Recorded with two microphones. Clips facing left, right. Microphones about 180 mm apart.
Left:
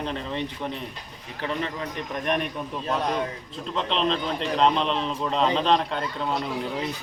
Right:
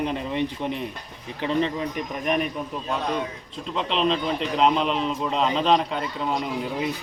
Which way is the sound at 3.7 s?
5° right (ahead or behind).